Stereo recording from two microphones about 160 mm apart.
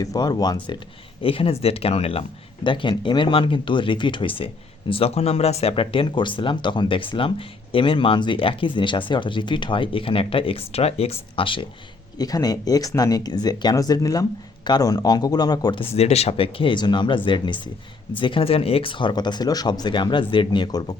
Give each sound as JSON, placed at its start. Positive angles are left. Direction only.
{"t": 0.0, "sound": "speech", "side_deg": 25}
{"t": 16.0, "sound": "speech", "side_deg": 40}